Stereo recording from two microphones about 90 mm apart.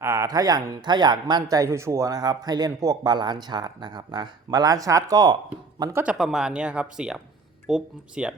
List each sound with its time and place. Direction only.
0.0 s speech: 35° right (ahead or behind); by 1.5 s 55° right (ahead or behind)
1.5 s a man's voice: 35° right (ahead or behind)
3.1 s speech: 55° right (ahead or behind)
6.1 s speech: 5° right (ahead or behind)